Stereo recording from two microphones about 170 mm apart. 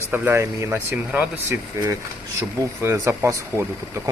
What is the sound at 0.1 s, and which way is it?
Speech, 15° right (ahead or behind).